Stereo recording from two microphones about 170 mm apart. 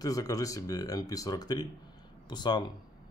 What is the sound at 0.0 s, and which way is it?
Speech, 20° left (ahead or behind).